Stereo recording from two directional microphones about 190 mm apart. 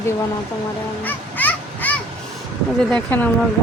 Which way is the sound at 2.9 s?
5° left (ahead or behind).